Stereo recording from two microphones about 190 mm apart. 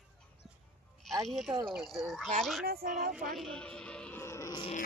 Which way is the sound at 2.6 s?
55° right (ahead or behind).